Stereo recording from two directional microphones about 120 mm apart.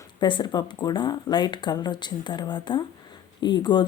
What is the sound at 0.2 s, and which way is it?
Speech, 40° left (ahead or behind).